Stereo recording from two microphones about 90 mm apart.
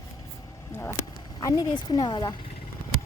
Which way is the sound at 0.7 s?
30° left (ahead or behind).